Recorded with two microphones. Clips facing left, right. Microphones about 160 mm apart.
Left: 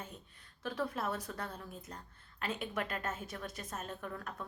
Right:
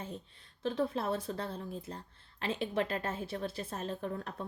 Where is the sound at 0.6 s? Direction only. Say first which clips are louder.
Right 4 dB; 25° right (ahead or behind).